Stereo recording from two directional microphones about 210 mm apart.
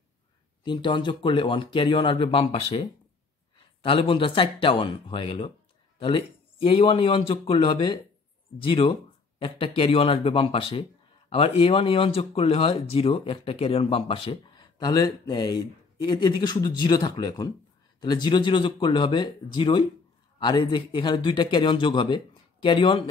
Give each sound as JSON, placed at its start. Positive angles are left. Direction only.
{"t": 0.7, "sound": "speech", "side_deg": 20}